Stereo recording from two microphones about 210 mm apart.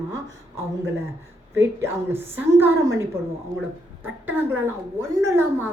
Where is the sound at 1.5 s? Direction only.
10° right (ahead or behind).